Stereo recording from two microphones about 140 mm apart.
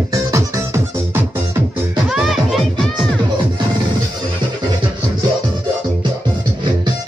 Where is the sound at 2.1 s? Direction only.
Centre (ahead or behind).